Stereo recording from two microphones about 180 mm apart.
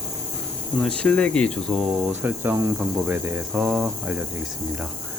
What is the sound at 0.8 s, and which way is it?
Speech, 5° left (ahead or behind).